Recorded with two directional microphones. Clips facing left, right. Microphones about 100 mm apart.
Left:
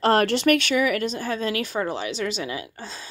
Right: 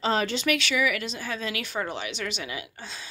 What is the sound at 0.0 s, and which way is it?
Speech, 60° left (ahead or behind).